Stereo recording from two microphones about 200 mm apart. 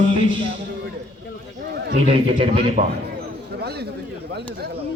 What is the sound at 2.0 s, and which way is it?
Speech, 30° right (ahead or behind).